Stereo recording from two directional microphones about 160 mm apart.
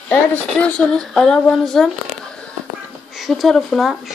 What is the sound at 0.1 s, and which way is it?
Speech, 5° left (ahead or behind).